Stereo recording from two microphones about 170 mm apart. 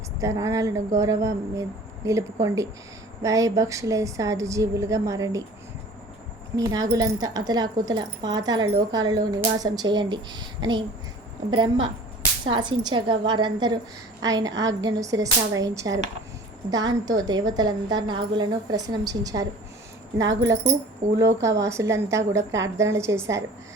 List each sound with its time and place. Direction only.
0.2 s a woman's voice: 20° right (ahead or behind)
6.6 s speech: 20° right (ahead or behind)
20.1 s speech: 90° right
21.2 s a woman's voice: 15° right (ahead or behind)